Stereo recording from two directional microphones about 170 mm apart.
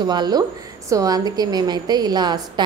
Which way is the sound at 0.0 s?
25° right (ahead or behind).